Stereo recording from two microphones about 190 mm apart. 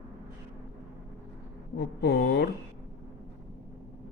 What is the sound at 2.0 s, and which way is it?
Speech, 60° left (ahead or behind).